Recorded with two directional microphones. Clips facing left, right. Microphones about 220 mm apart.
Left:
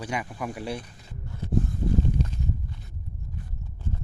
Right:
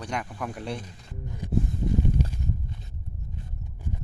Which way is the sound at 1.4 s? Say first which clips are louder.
Left 1 dB; 15° right (ahead or behind).